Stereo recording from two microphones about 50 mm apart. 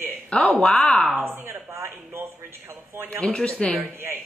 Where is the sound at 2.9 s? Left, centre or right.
Right.